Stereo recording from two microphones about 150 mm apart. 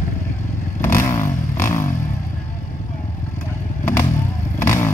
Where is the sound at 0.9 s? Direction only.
20° left (ahead or behind).